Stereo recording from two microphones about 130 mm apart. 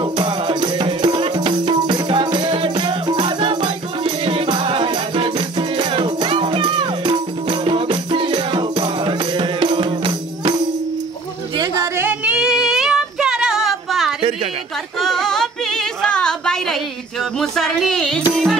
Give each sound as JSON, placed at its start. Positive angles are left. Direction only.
{"t": 0.0, "sound": "music", "side_deg": -40}
{"t": 11.8, "sound": "female singing", "side_deg": -20}
{"t": 15.0, "sound": "music", "side_deg": 0}